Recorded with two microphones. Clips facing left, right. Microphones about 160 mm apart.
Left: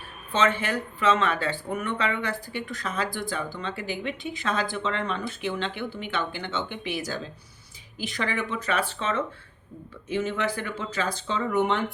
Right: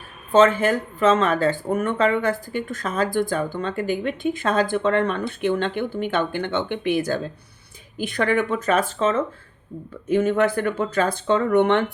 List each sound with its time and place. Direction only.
0.3 s speech: 45° right (ahead or behind); by 11.9 s 65° right (ahead or behind)